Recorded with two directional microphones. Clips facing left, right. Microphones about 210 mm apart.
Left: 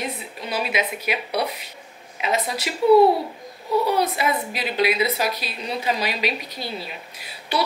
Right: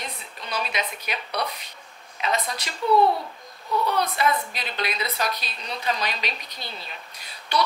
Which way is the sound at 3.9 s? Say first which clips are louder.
Left 2 dB; 5° left (ahead or behind).